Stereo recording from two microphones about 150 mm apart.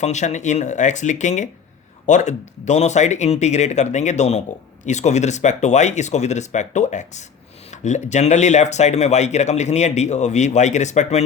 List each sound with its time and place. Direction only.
0.0 s speech: 50° left (ahead or behind)